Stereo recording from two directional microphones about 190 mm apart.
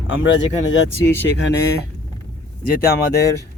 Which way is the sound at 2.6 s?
50° left (ahead or behind).